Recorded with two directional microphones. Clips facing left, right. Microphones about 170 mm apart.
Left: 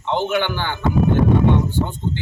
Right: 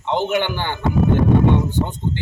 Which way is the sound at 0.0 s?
15° right (ahead or behind).